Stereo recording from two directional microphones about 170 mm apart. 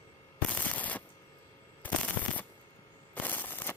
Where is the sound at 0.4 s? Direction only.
10° left (ahead or behind).